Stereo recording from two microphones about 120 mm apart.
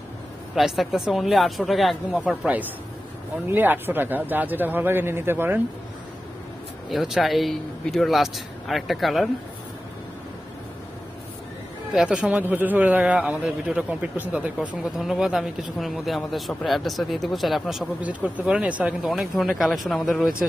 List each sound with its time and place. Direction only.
0.6 s a man's voice: centre (ahead or behind); by 5.6 s 20° right (ahead or behind)
6.9 s a man's voice: centre (ahead or behind)
11.9 s a man's voice: 5° right (ahead or behind)